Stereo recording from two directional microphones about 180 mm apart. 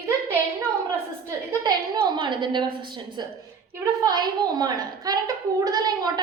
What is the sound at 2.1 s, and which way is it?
A woman's voice, 25° right (ahead or behind).